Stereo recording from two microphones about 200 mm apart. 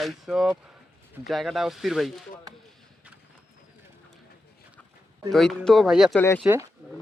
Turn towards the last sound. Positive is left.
turn(degrees=-10)  # may be behind; listen again after turning